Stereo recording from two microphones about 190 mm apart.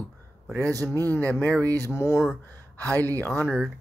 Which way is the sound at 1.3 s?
10° left (ahead or behind).